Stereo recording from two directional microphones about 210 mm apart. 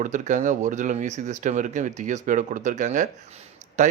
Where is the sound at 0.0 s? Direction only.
35° right (ahead or behind).